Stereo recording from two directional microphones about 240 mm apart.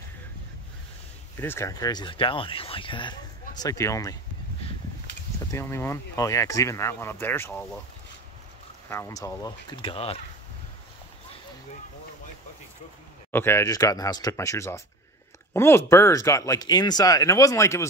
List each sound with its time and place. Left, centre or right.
1.4 s speech: centre
5.5 s speech: centre
8.8 s speech: centre
13.3 s speech: centre